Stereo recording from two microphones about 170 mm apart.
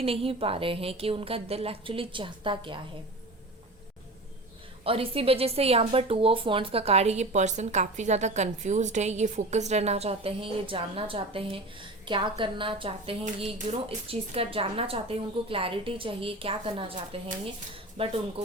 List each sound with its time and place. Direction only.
0.0 s speech: 35° right (ahead or behind)
4.8 s speech: 35° right (ahead or behind)